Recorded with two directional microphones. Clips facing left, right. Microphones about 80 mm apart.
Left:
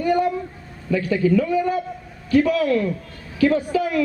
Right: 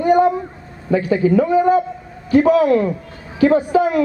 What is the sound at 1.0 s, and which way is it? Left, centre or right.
A man's voice, right.